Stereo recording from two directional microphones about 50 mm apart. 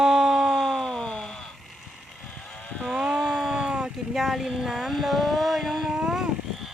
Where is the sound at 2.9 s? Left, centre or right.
Centre.